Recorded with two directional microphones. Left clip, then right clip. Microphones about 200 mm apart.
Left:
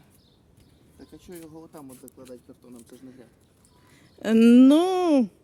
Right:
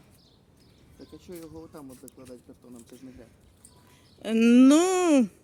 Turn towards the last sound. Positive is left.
turn(degrees=5)  # may be behind; listen again after turning